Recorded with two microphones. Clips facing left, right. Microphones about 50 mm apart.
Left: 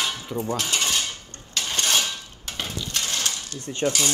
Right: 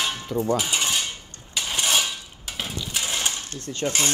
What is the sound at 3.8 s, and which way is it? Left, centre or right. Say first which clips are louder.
Speech: left 1 dB; right.